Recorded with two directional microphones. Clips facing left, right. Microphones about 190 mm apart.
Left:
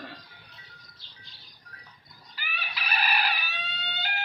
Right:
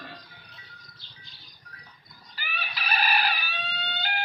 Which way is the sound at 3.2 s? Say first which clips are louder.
Right 2 dB; 30° right (ahead or behind).